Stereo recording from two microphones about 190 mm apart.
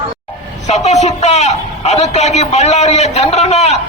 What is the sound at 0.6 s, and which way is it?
A man's voice, 35° left (ahead or behind).